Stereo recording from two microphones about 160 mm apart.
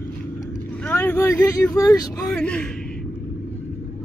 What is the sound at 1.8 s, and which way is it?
Speech, 20° left (ahead or behind).